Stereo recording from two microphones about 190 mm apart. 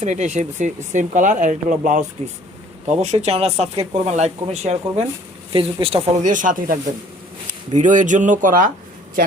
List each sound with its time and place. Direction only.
0.0 s speech: 40° right (ahead or behind)
6.2 s speech: 45° right (ahead or behind)